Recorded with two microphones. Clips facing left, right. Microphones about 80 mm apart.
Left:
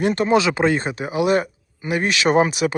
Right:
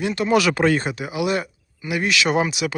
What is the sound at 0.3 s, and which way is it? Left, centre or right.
Speech, left.